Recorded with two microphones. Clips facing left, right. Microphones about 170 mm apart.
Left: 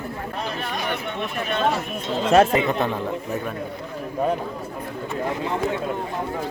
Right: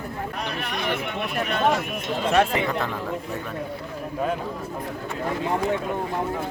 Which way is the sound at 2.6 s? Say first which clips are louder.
Left 3 dB; 20° left (ahead or behind).